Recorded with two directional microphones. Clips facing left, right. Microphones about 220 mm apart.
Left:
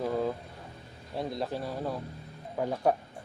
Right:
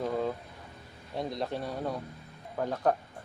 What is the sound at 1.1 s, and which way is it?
Speech, centre (ahead or behind).